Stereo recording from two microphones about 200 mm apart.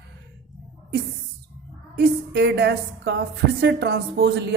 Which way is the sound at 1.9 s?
55° right (ahead or behind).